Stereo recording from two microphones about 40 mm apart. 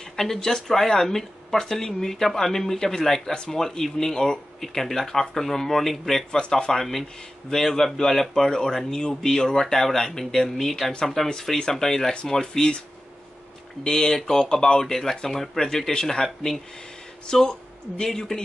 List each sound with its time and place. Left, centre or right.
0.1 s speech: centre
13.8 s speech: centre